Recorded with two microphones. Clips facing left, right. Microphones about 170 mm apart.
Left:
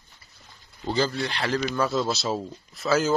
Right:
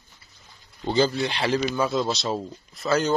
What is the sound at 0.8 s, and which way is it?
Speech, 25° right (ahead or behind).